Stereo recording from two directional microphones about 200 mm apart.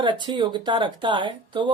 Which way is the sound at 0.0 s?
25° right (ahead or behind).